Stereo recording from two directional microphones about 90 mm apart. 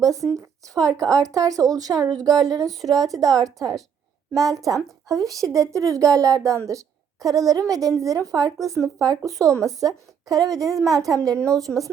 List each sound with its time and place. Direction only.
0.0 s a woman's voice: 40° right (ahead or behind)
3.2 s a woman's voice: 5° left (ahead or behind)
4.4 s a woman's voice: 40° right (ahead or behind)
10.8 s a woman's voice: centre (ahead or behind)
11.0 s a woman's voice: 40° right (ahead or behind)
11.7 s speech: 10° left (ahead or behind)